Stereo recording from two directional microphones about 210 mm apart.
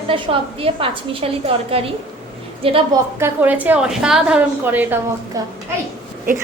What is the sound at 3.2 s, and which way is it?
A woman's voice, 10° right (ahead or behind).